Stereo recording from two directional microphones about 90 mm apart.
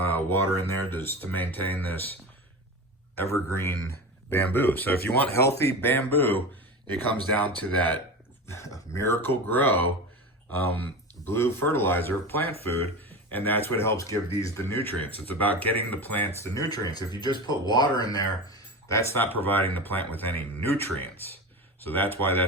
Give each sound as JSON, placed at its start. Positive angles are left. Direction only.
{"t": 0.1, "sound": "speech", "side_deg": 25}
{"t": 3.2, "sound": "speech", "side_deg": 30}
{"t": 5.3, "sound": "speech", "side_deg": 30}
{"t": 7.4, "sound": "speech", "side_deg": 15}
{"t": 8.4, "sound": "speech", "side_deg": 35}
{"t": 11.3, "sound": "speech", "side_deg": 25}
{"t": 16.4, "sound": "speech", "side_deg": 40}
{"t": 19.2, "sound": "speech", "side_deg": 20}